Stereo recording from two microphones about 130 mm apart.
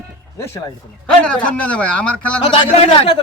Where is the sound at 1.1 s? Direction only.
5° left (ahead or behind).